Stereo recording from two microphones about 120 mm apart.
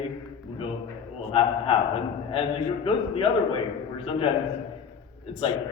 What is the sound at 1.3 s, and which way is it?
A man's voice, 50° left (ahead or behind).